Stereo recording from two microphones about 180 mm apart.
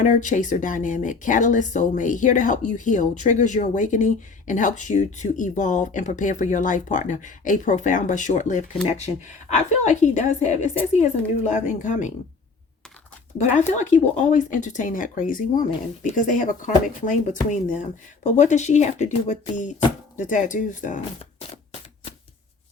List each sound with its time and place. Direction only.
0.0 s a woman's voice: 45° left (ahead or behind)
13.4 s speech: 40° left (ahead or behind)